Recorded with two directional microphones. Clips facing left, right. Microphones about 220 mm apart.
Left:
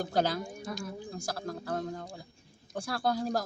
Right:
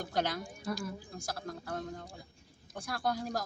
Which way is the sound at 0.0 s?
30° left (ahead or behind).